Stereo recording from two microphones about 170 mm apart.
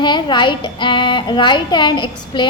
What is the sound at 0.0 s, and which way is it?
A child's voice, 25° left (ahead or behind).